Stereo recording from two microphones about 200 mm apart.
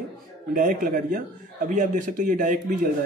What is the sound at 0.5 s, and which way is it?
Speech, 45° right (ahead or behind).